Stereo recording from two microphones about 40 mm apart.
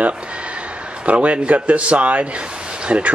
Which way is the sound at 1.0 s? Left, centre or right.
Right.